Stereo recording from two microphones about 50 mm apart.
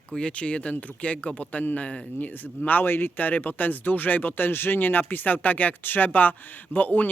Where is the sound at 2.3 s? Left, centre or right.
Left.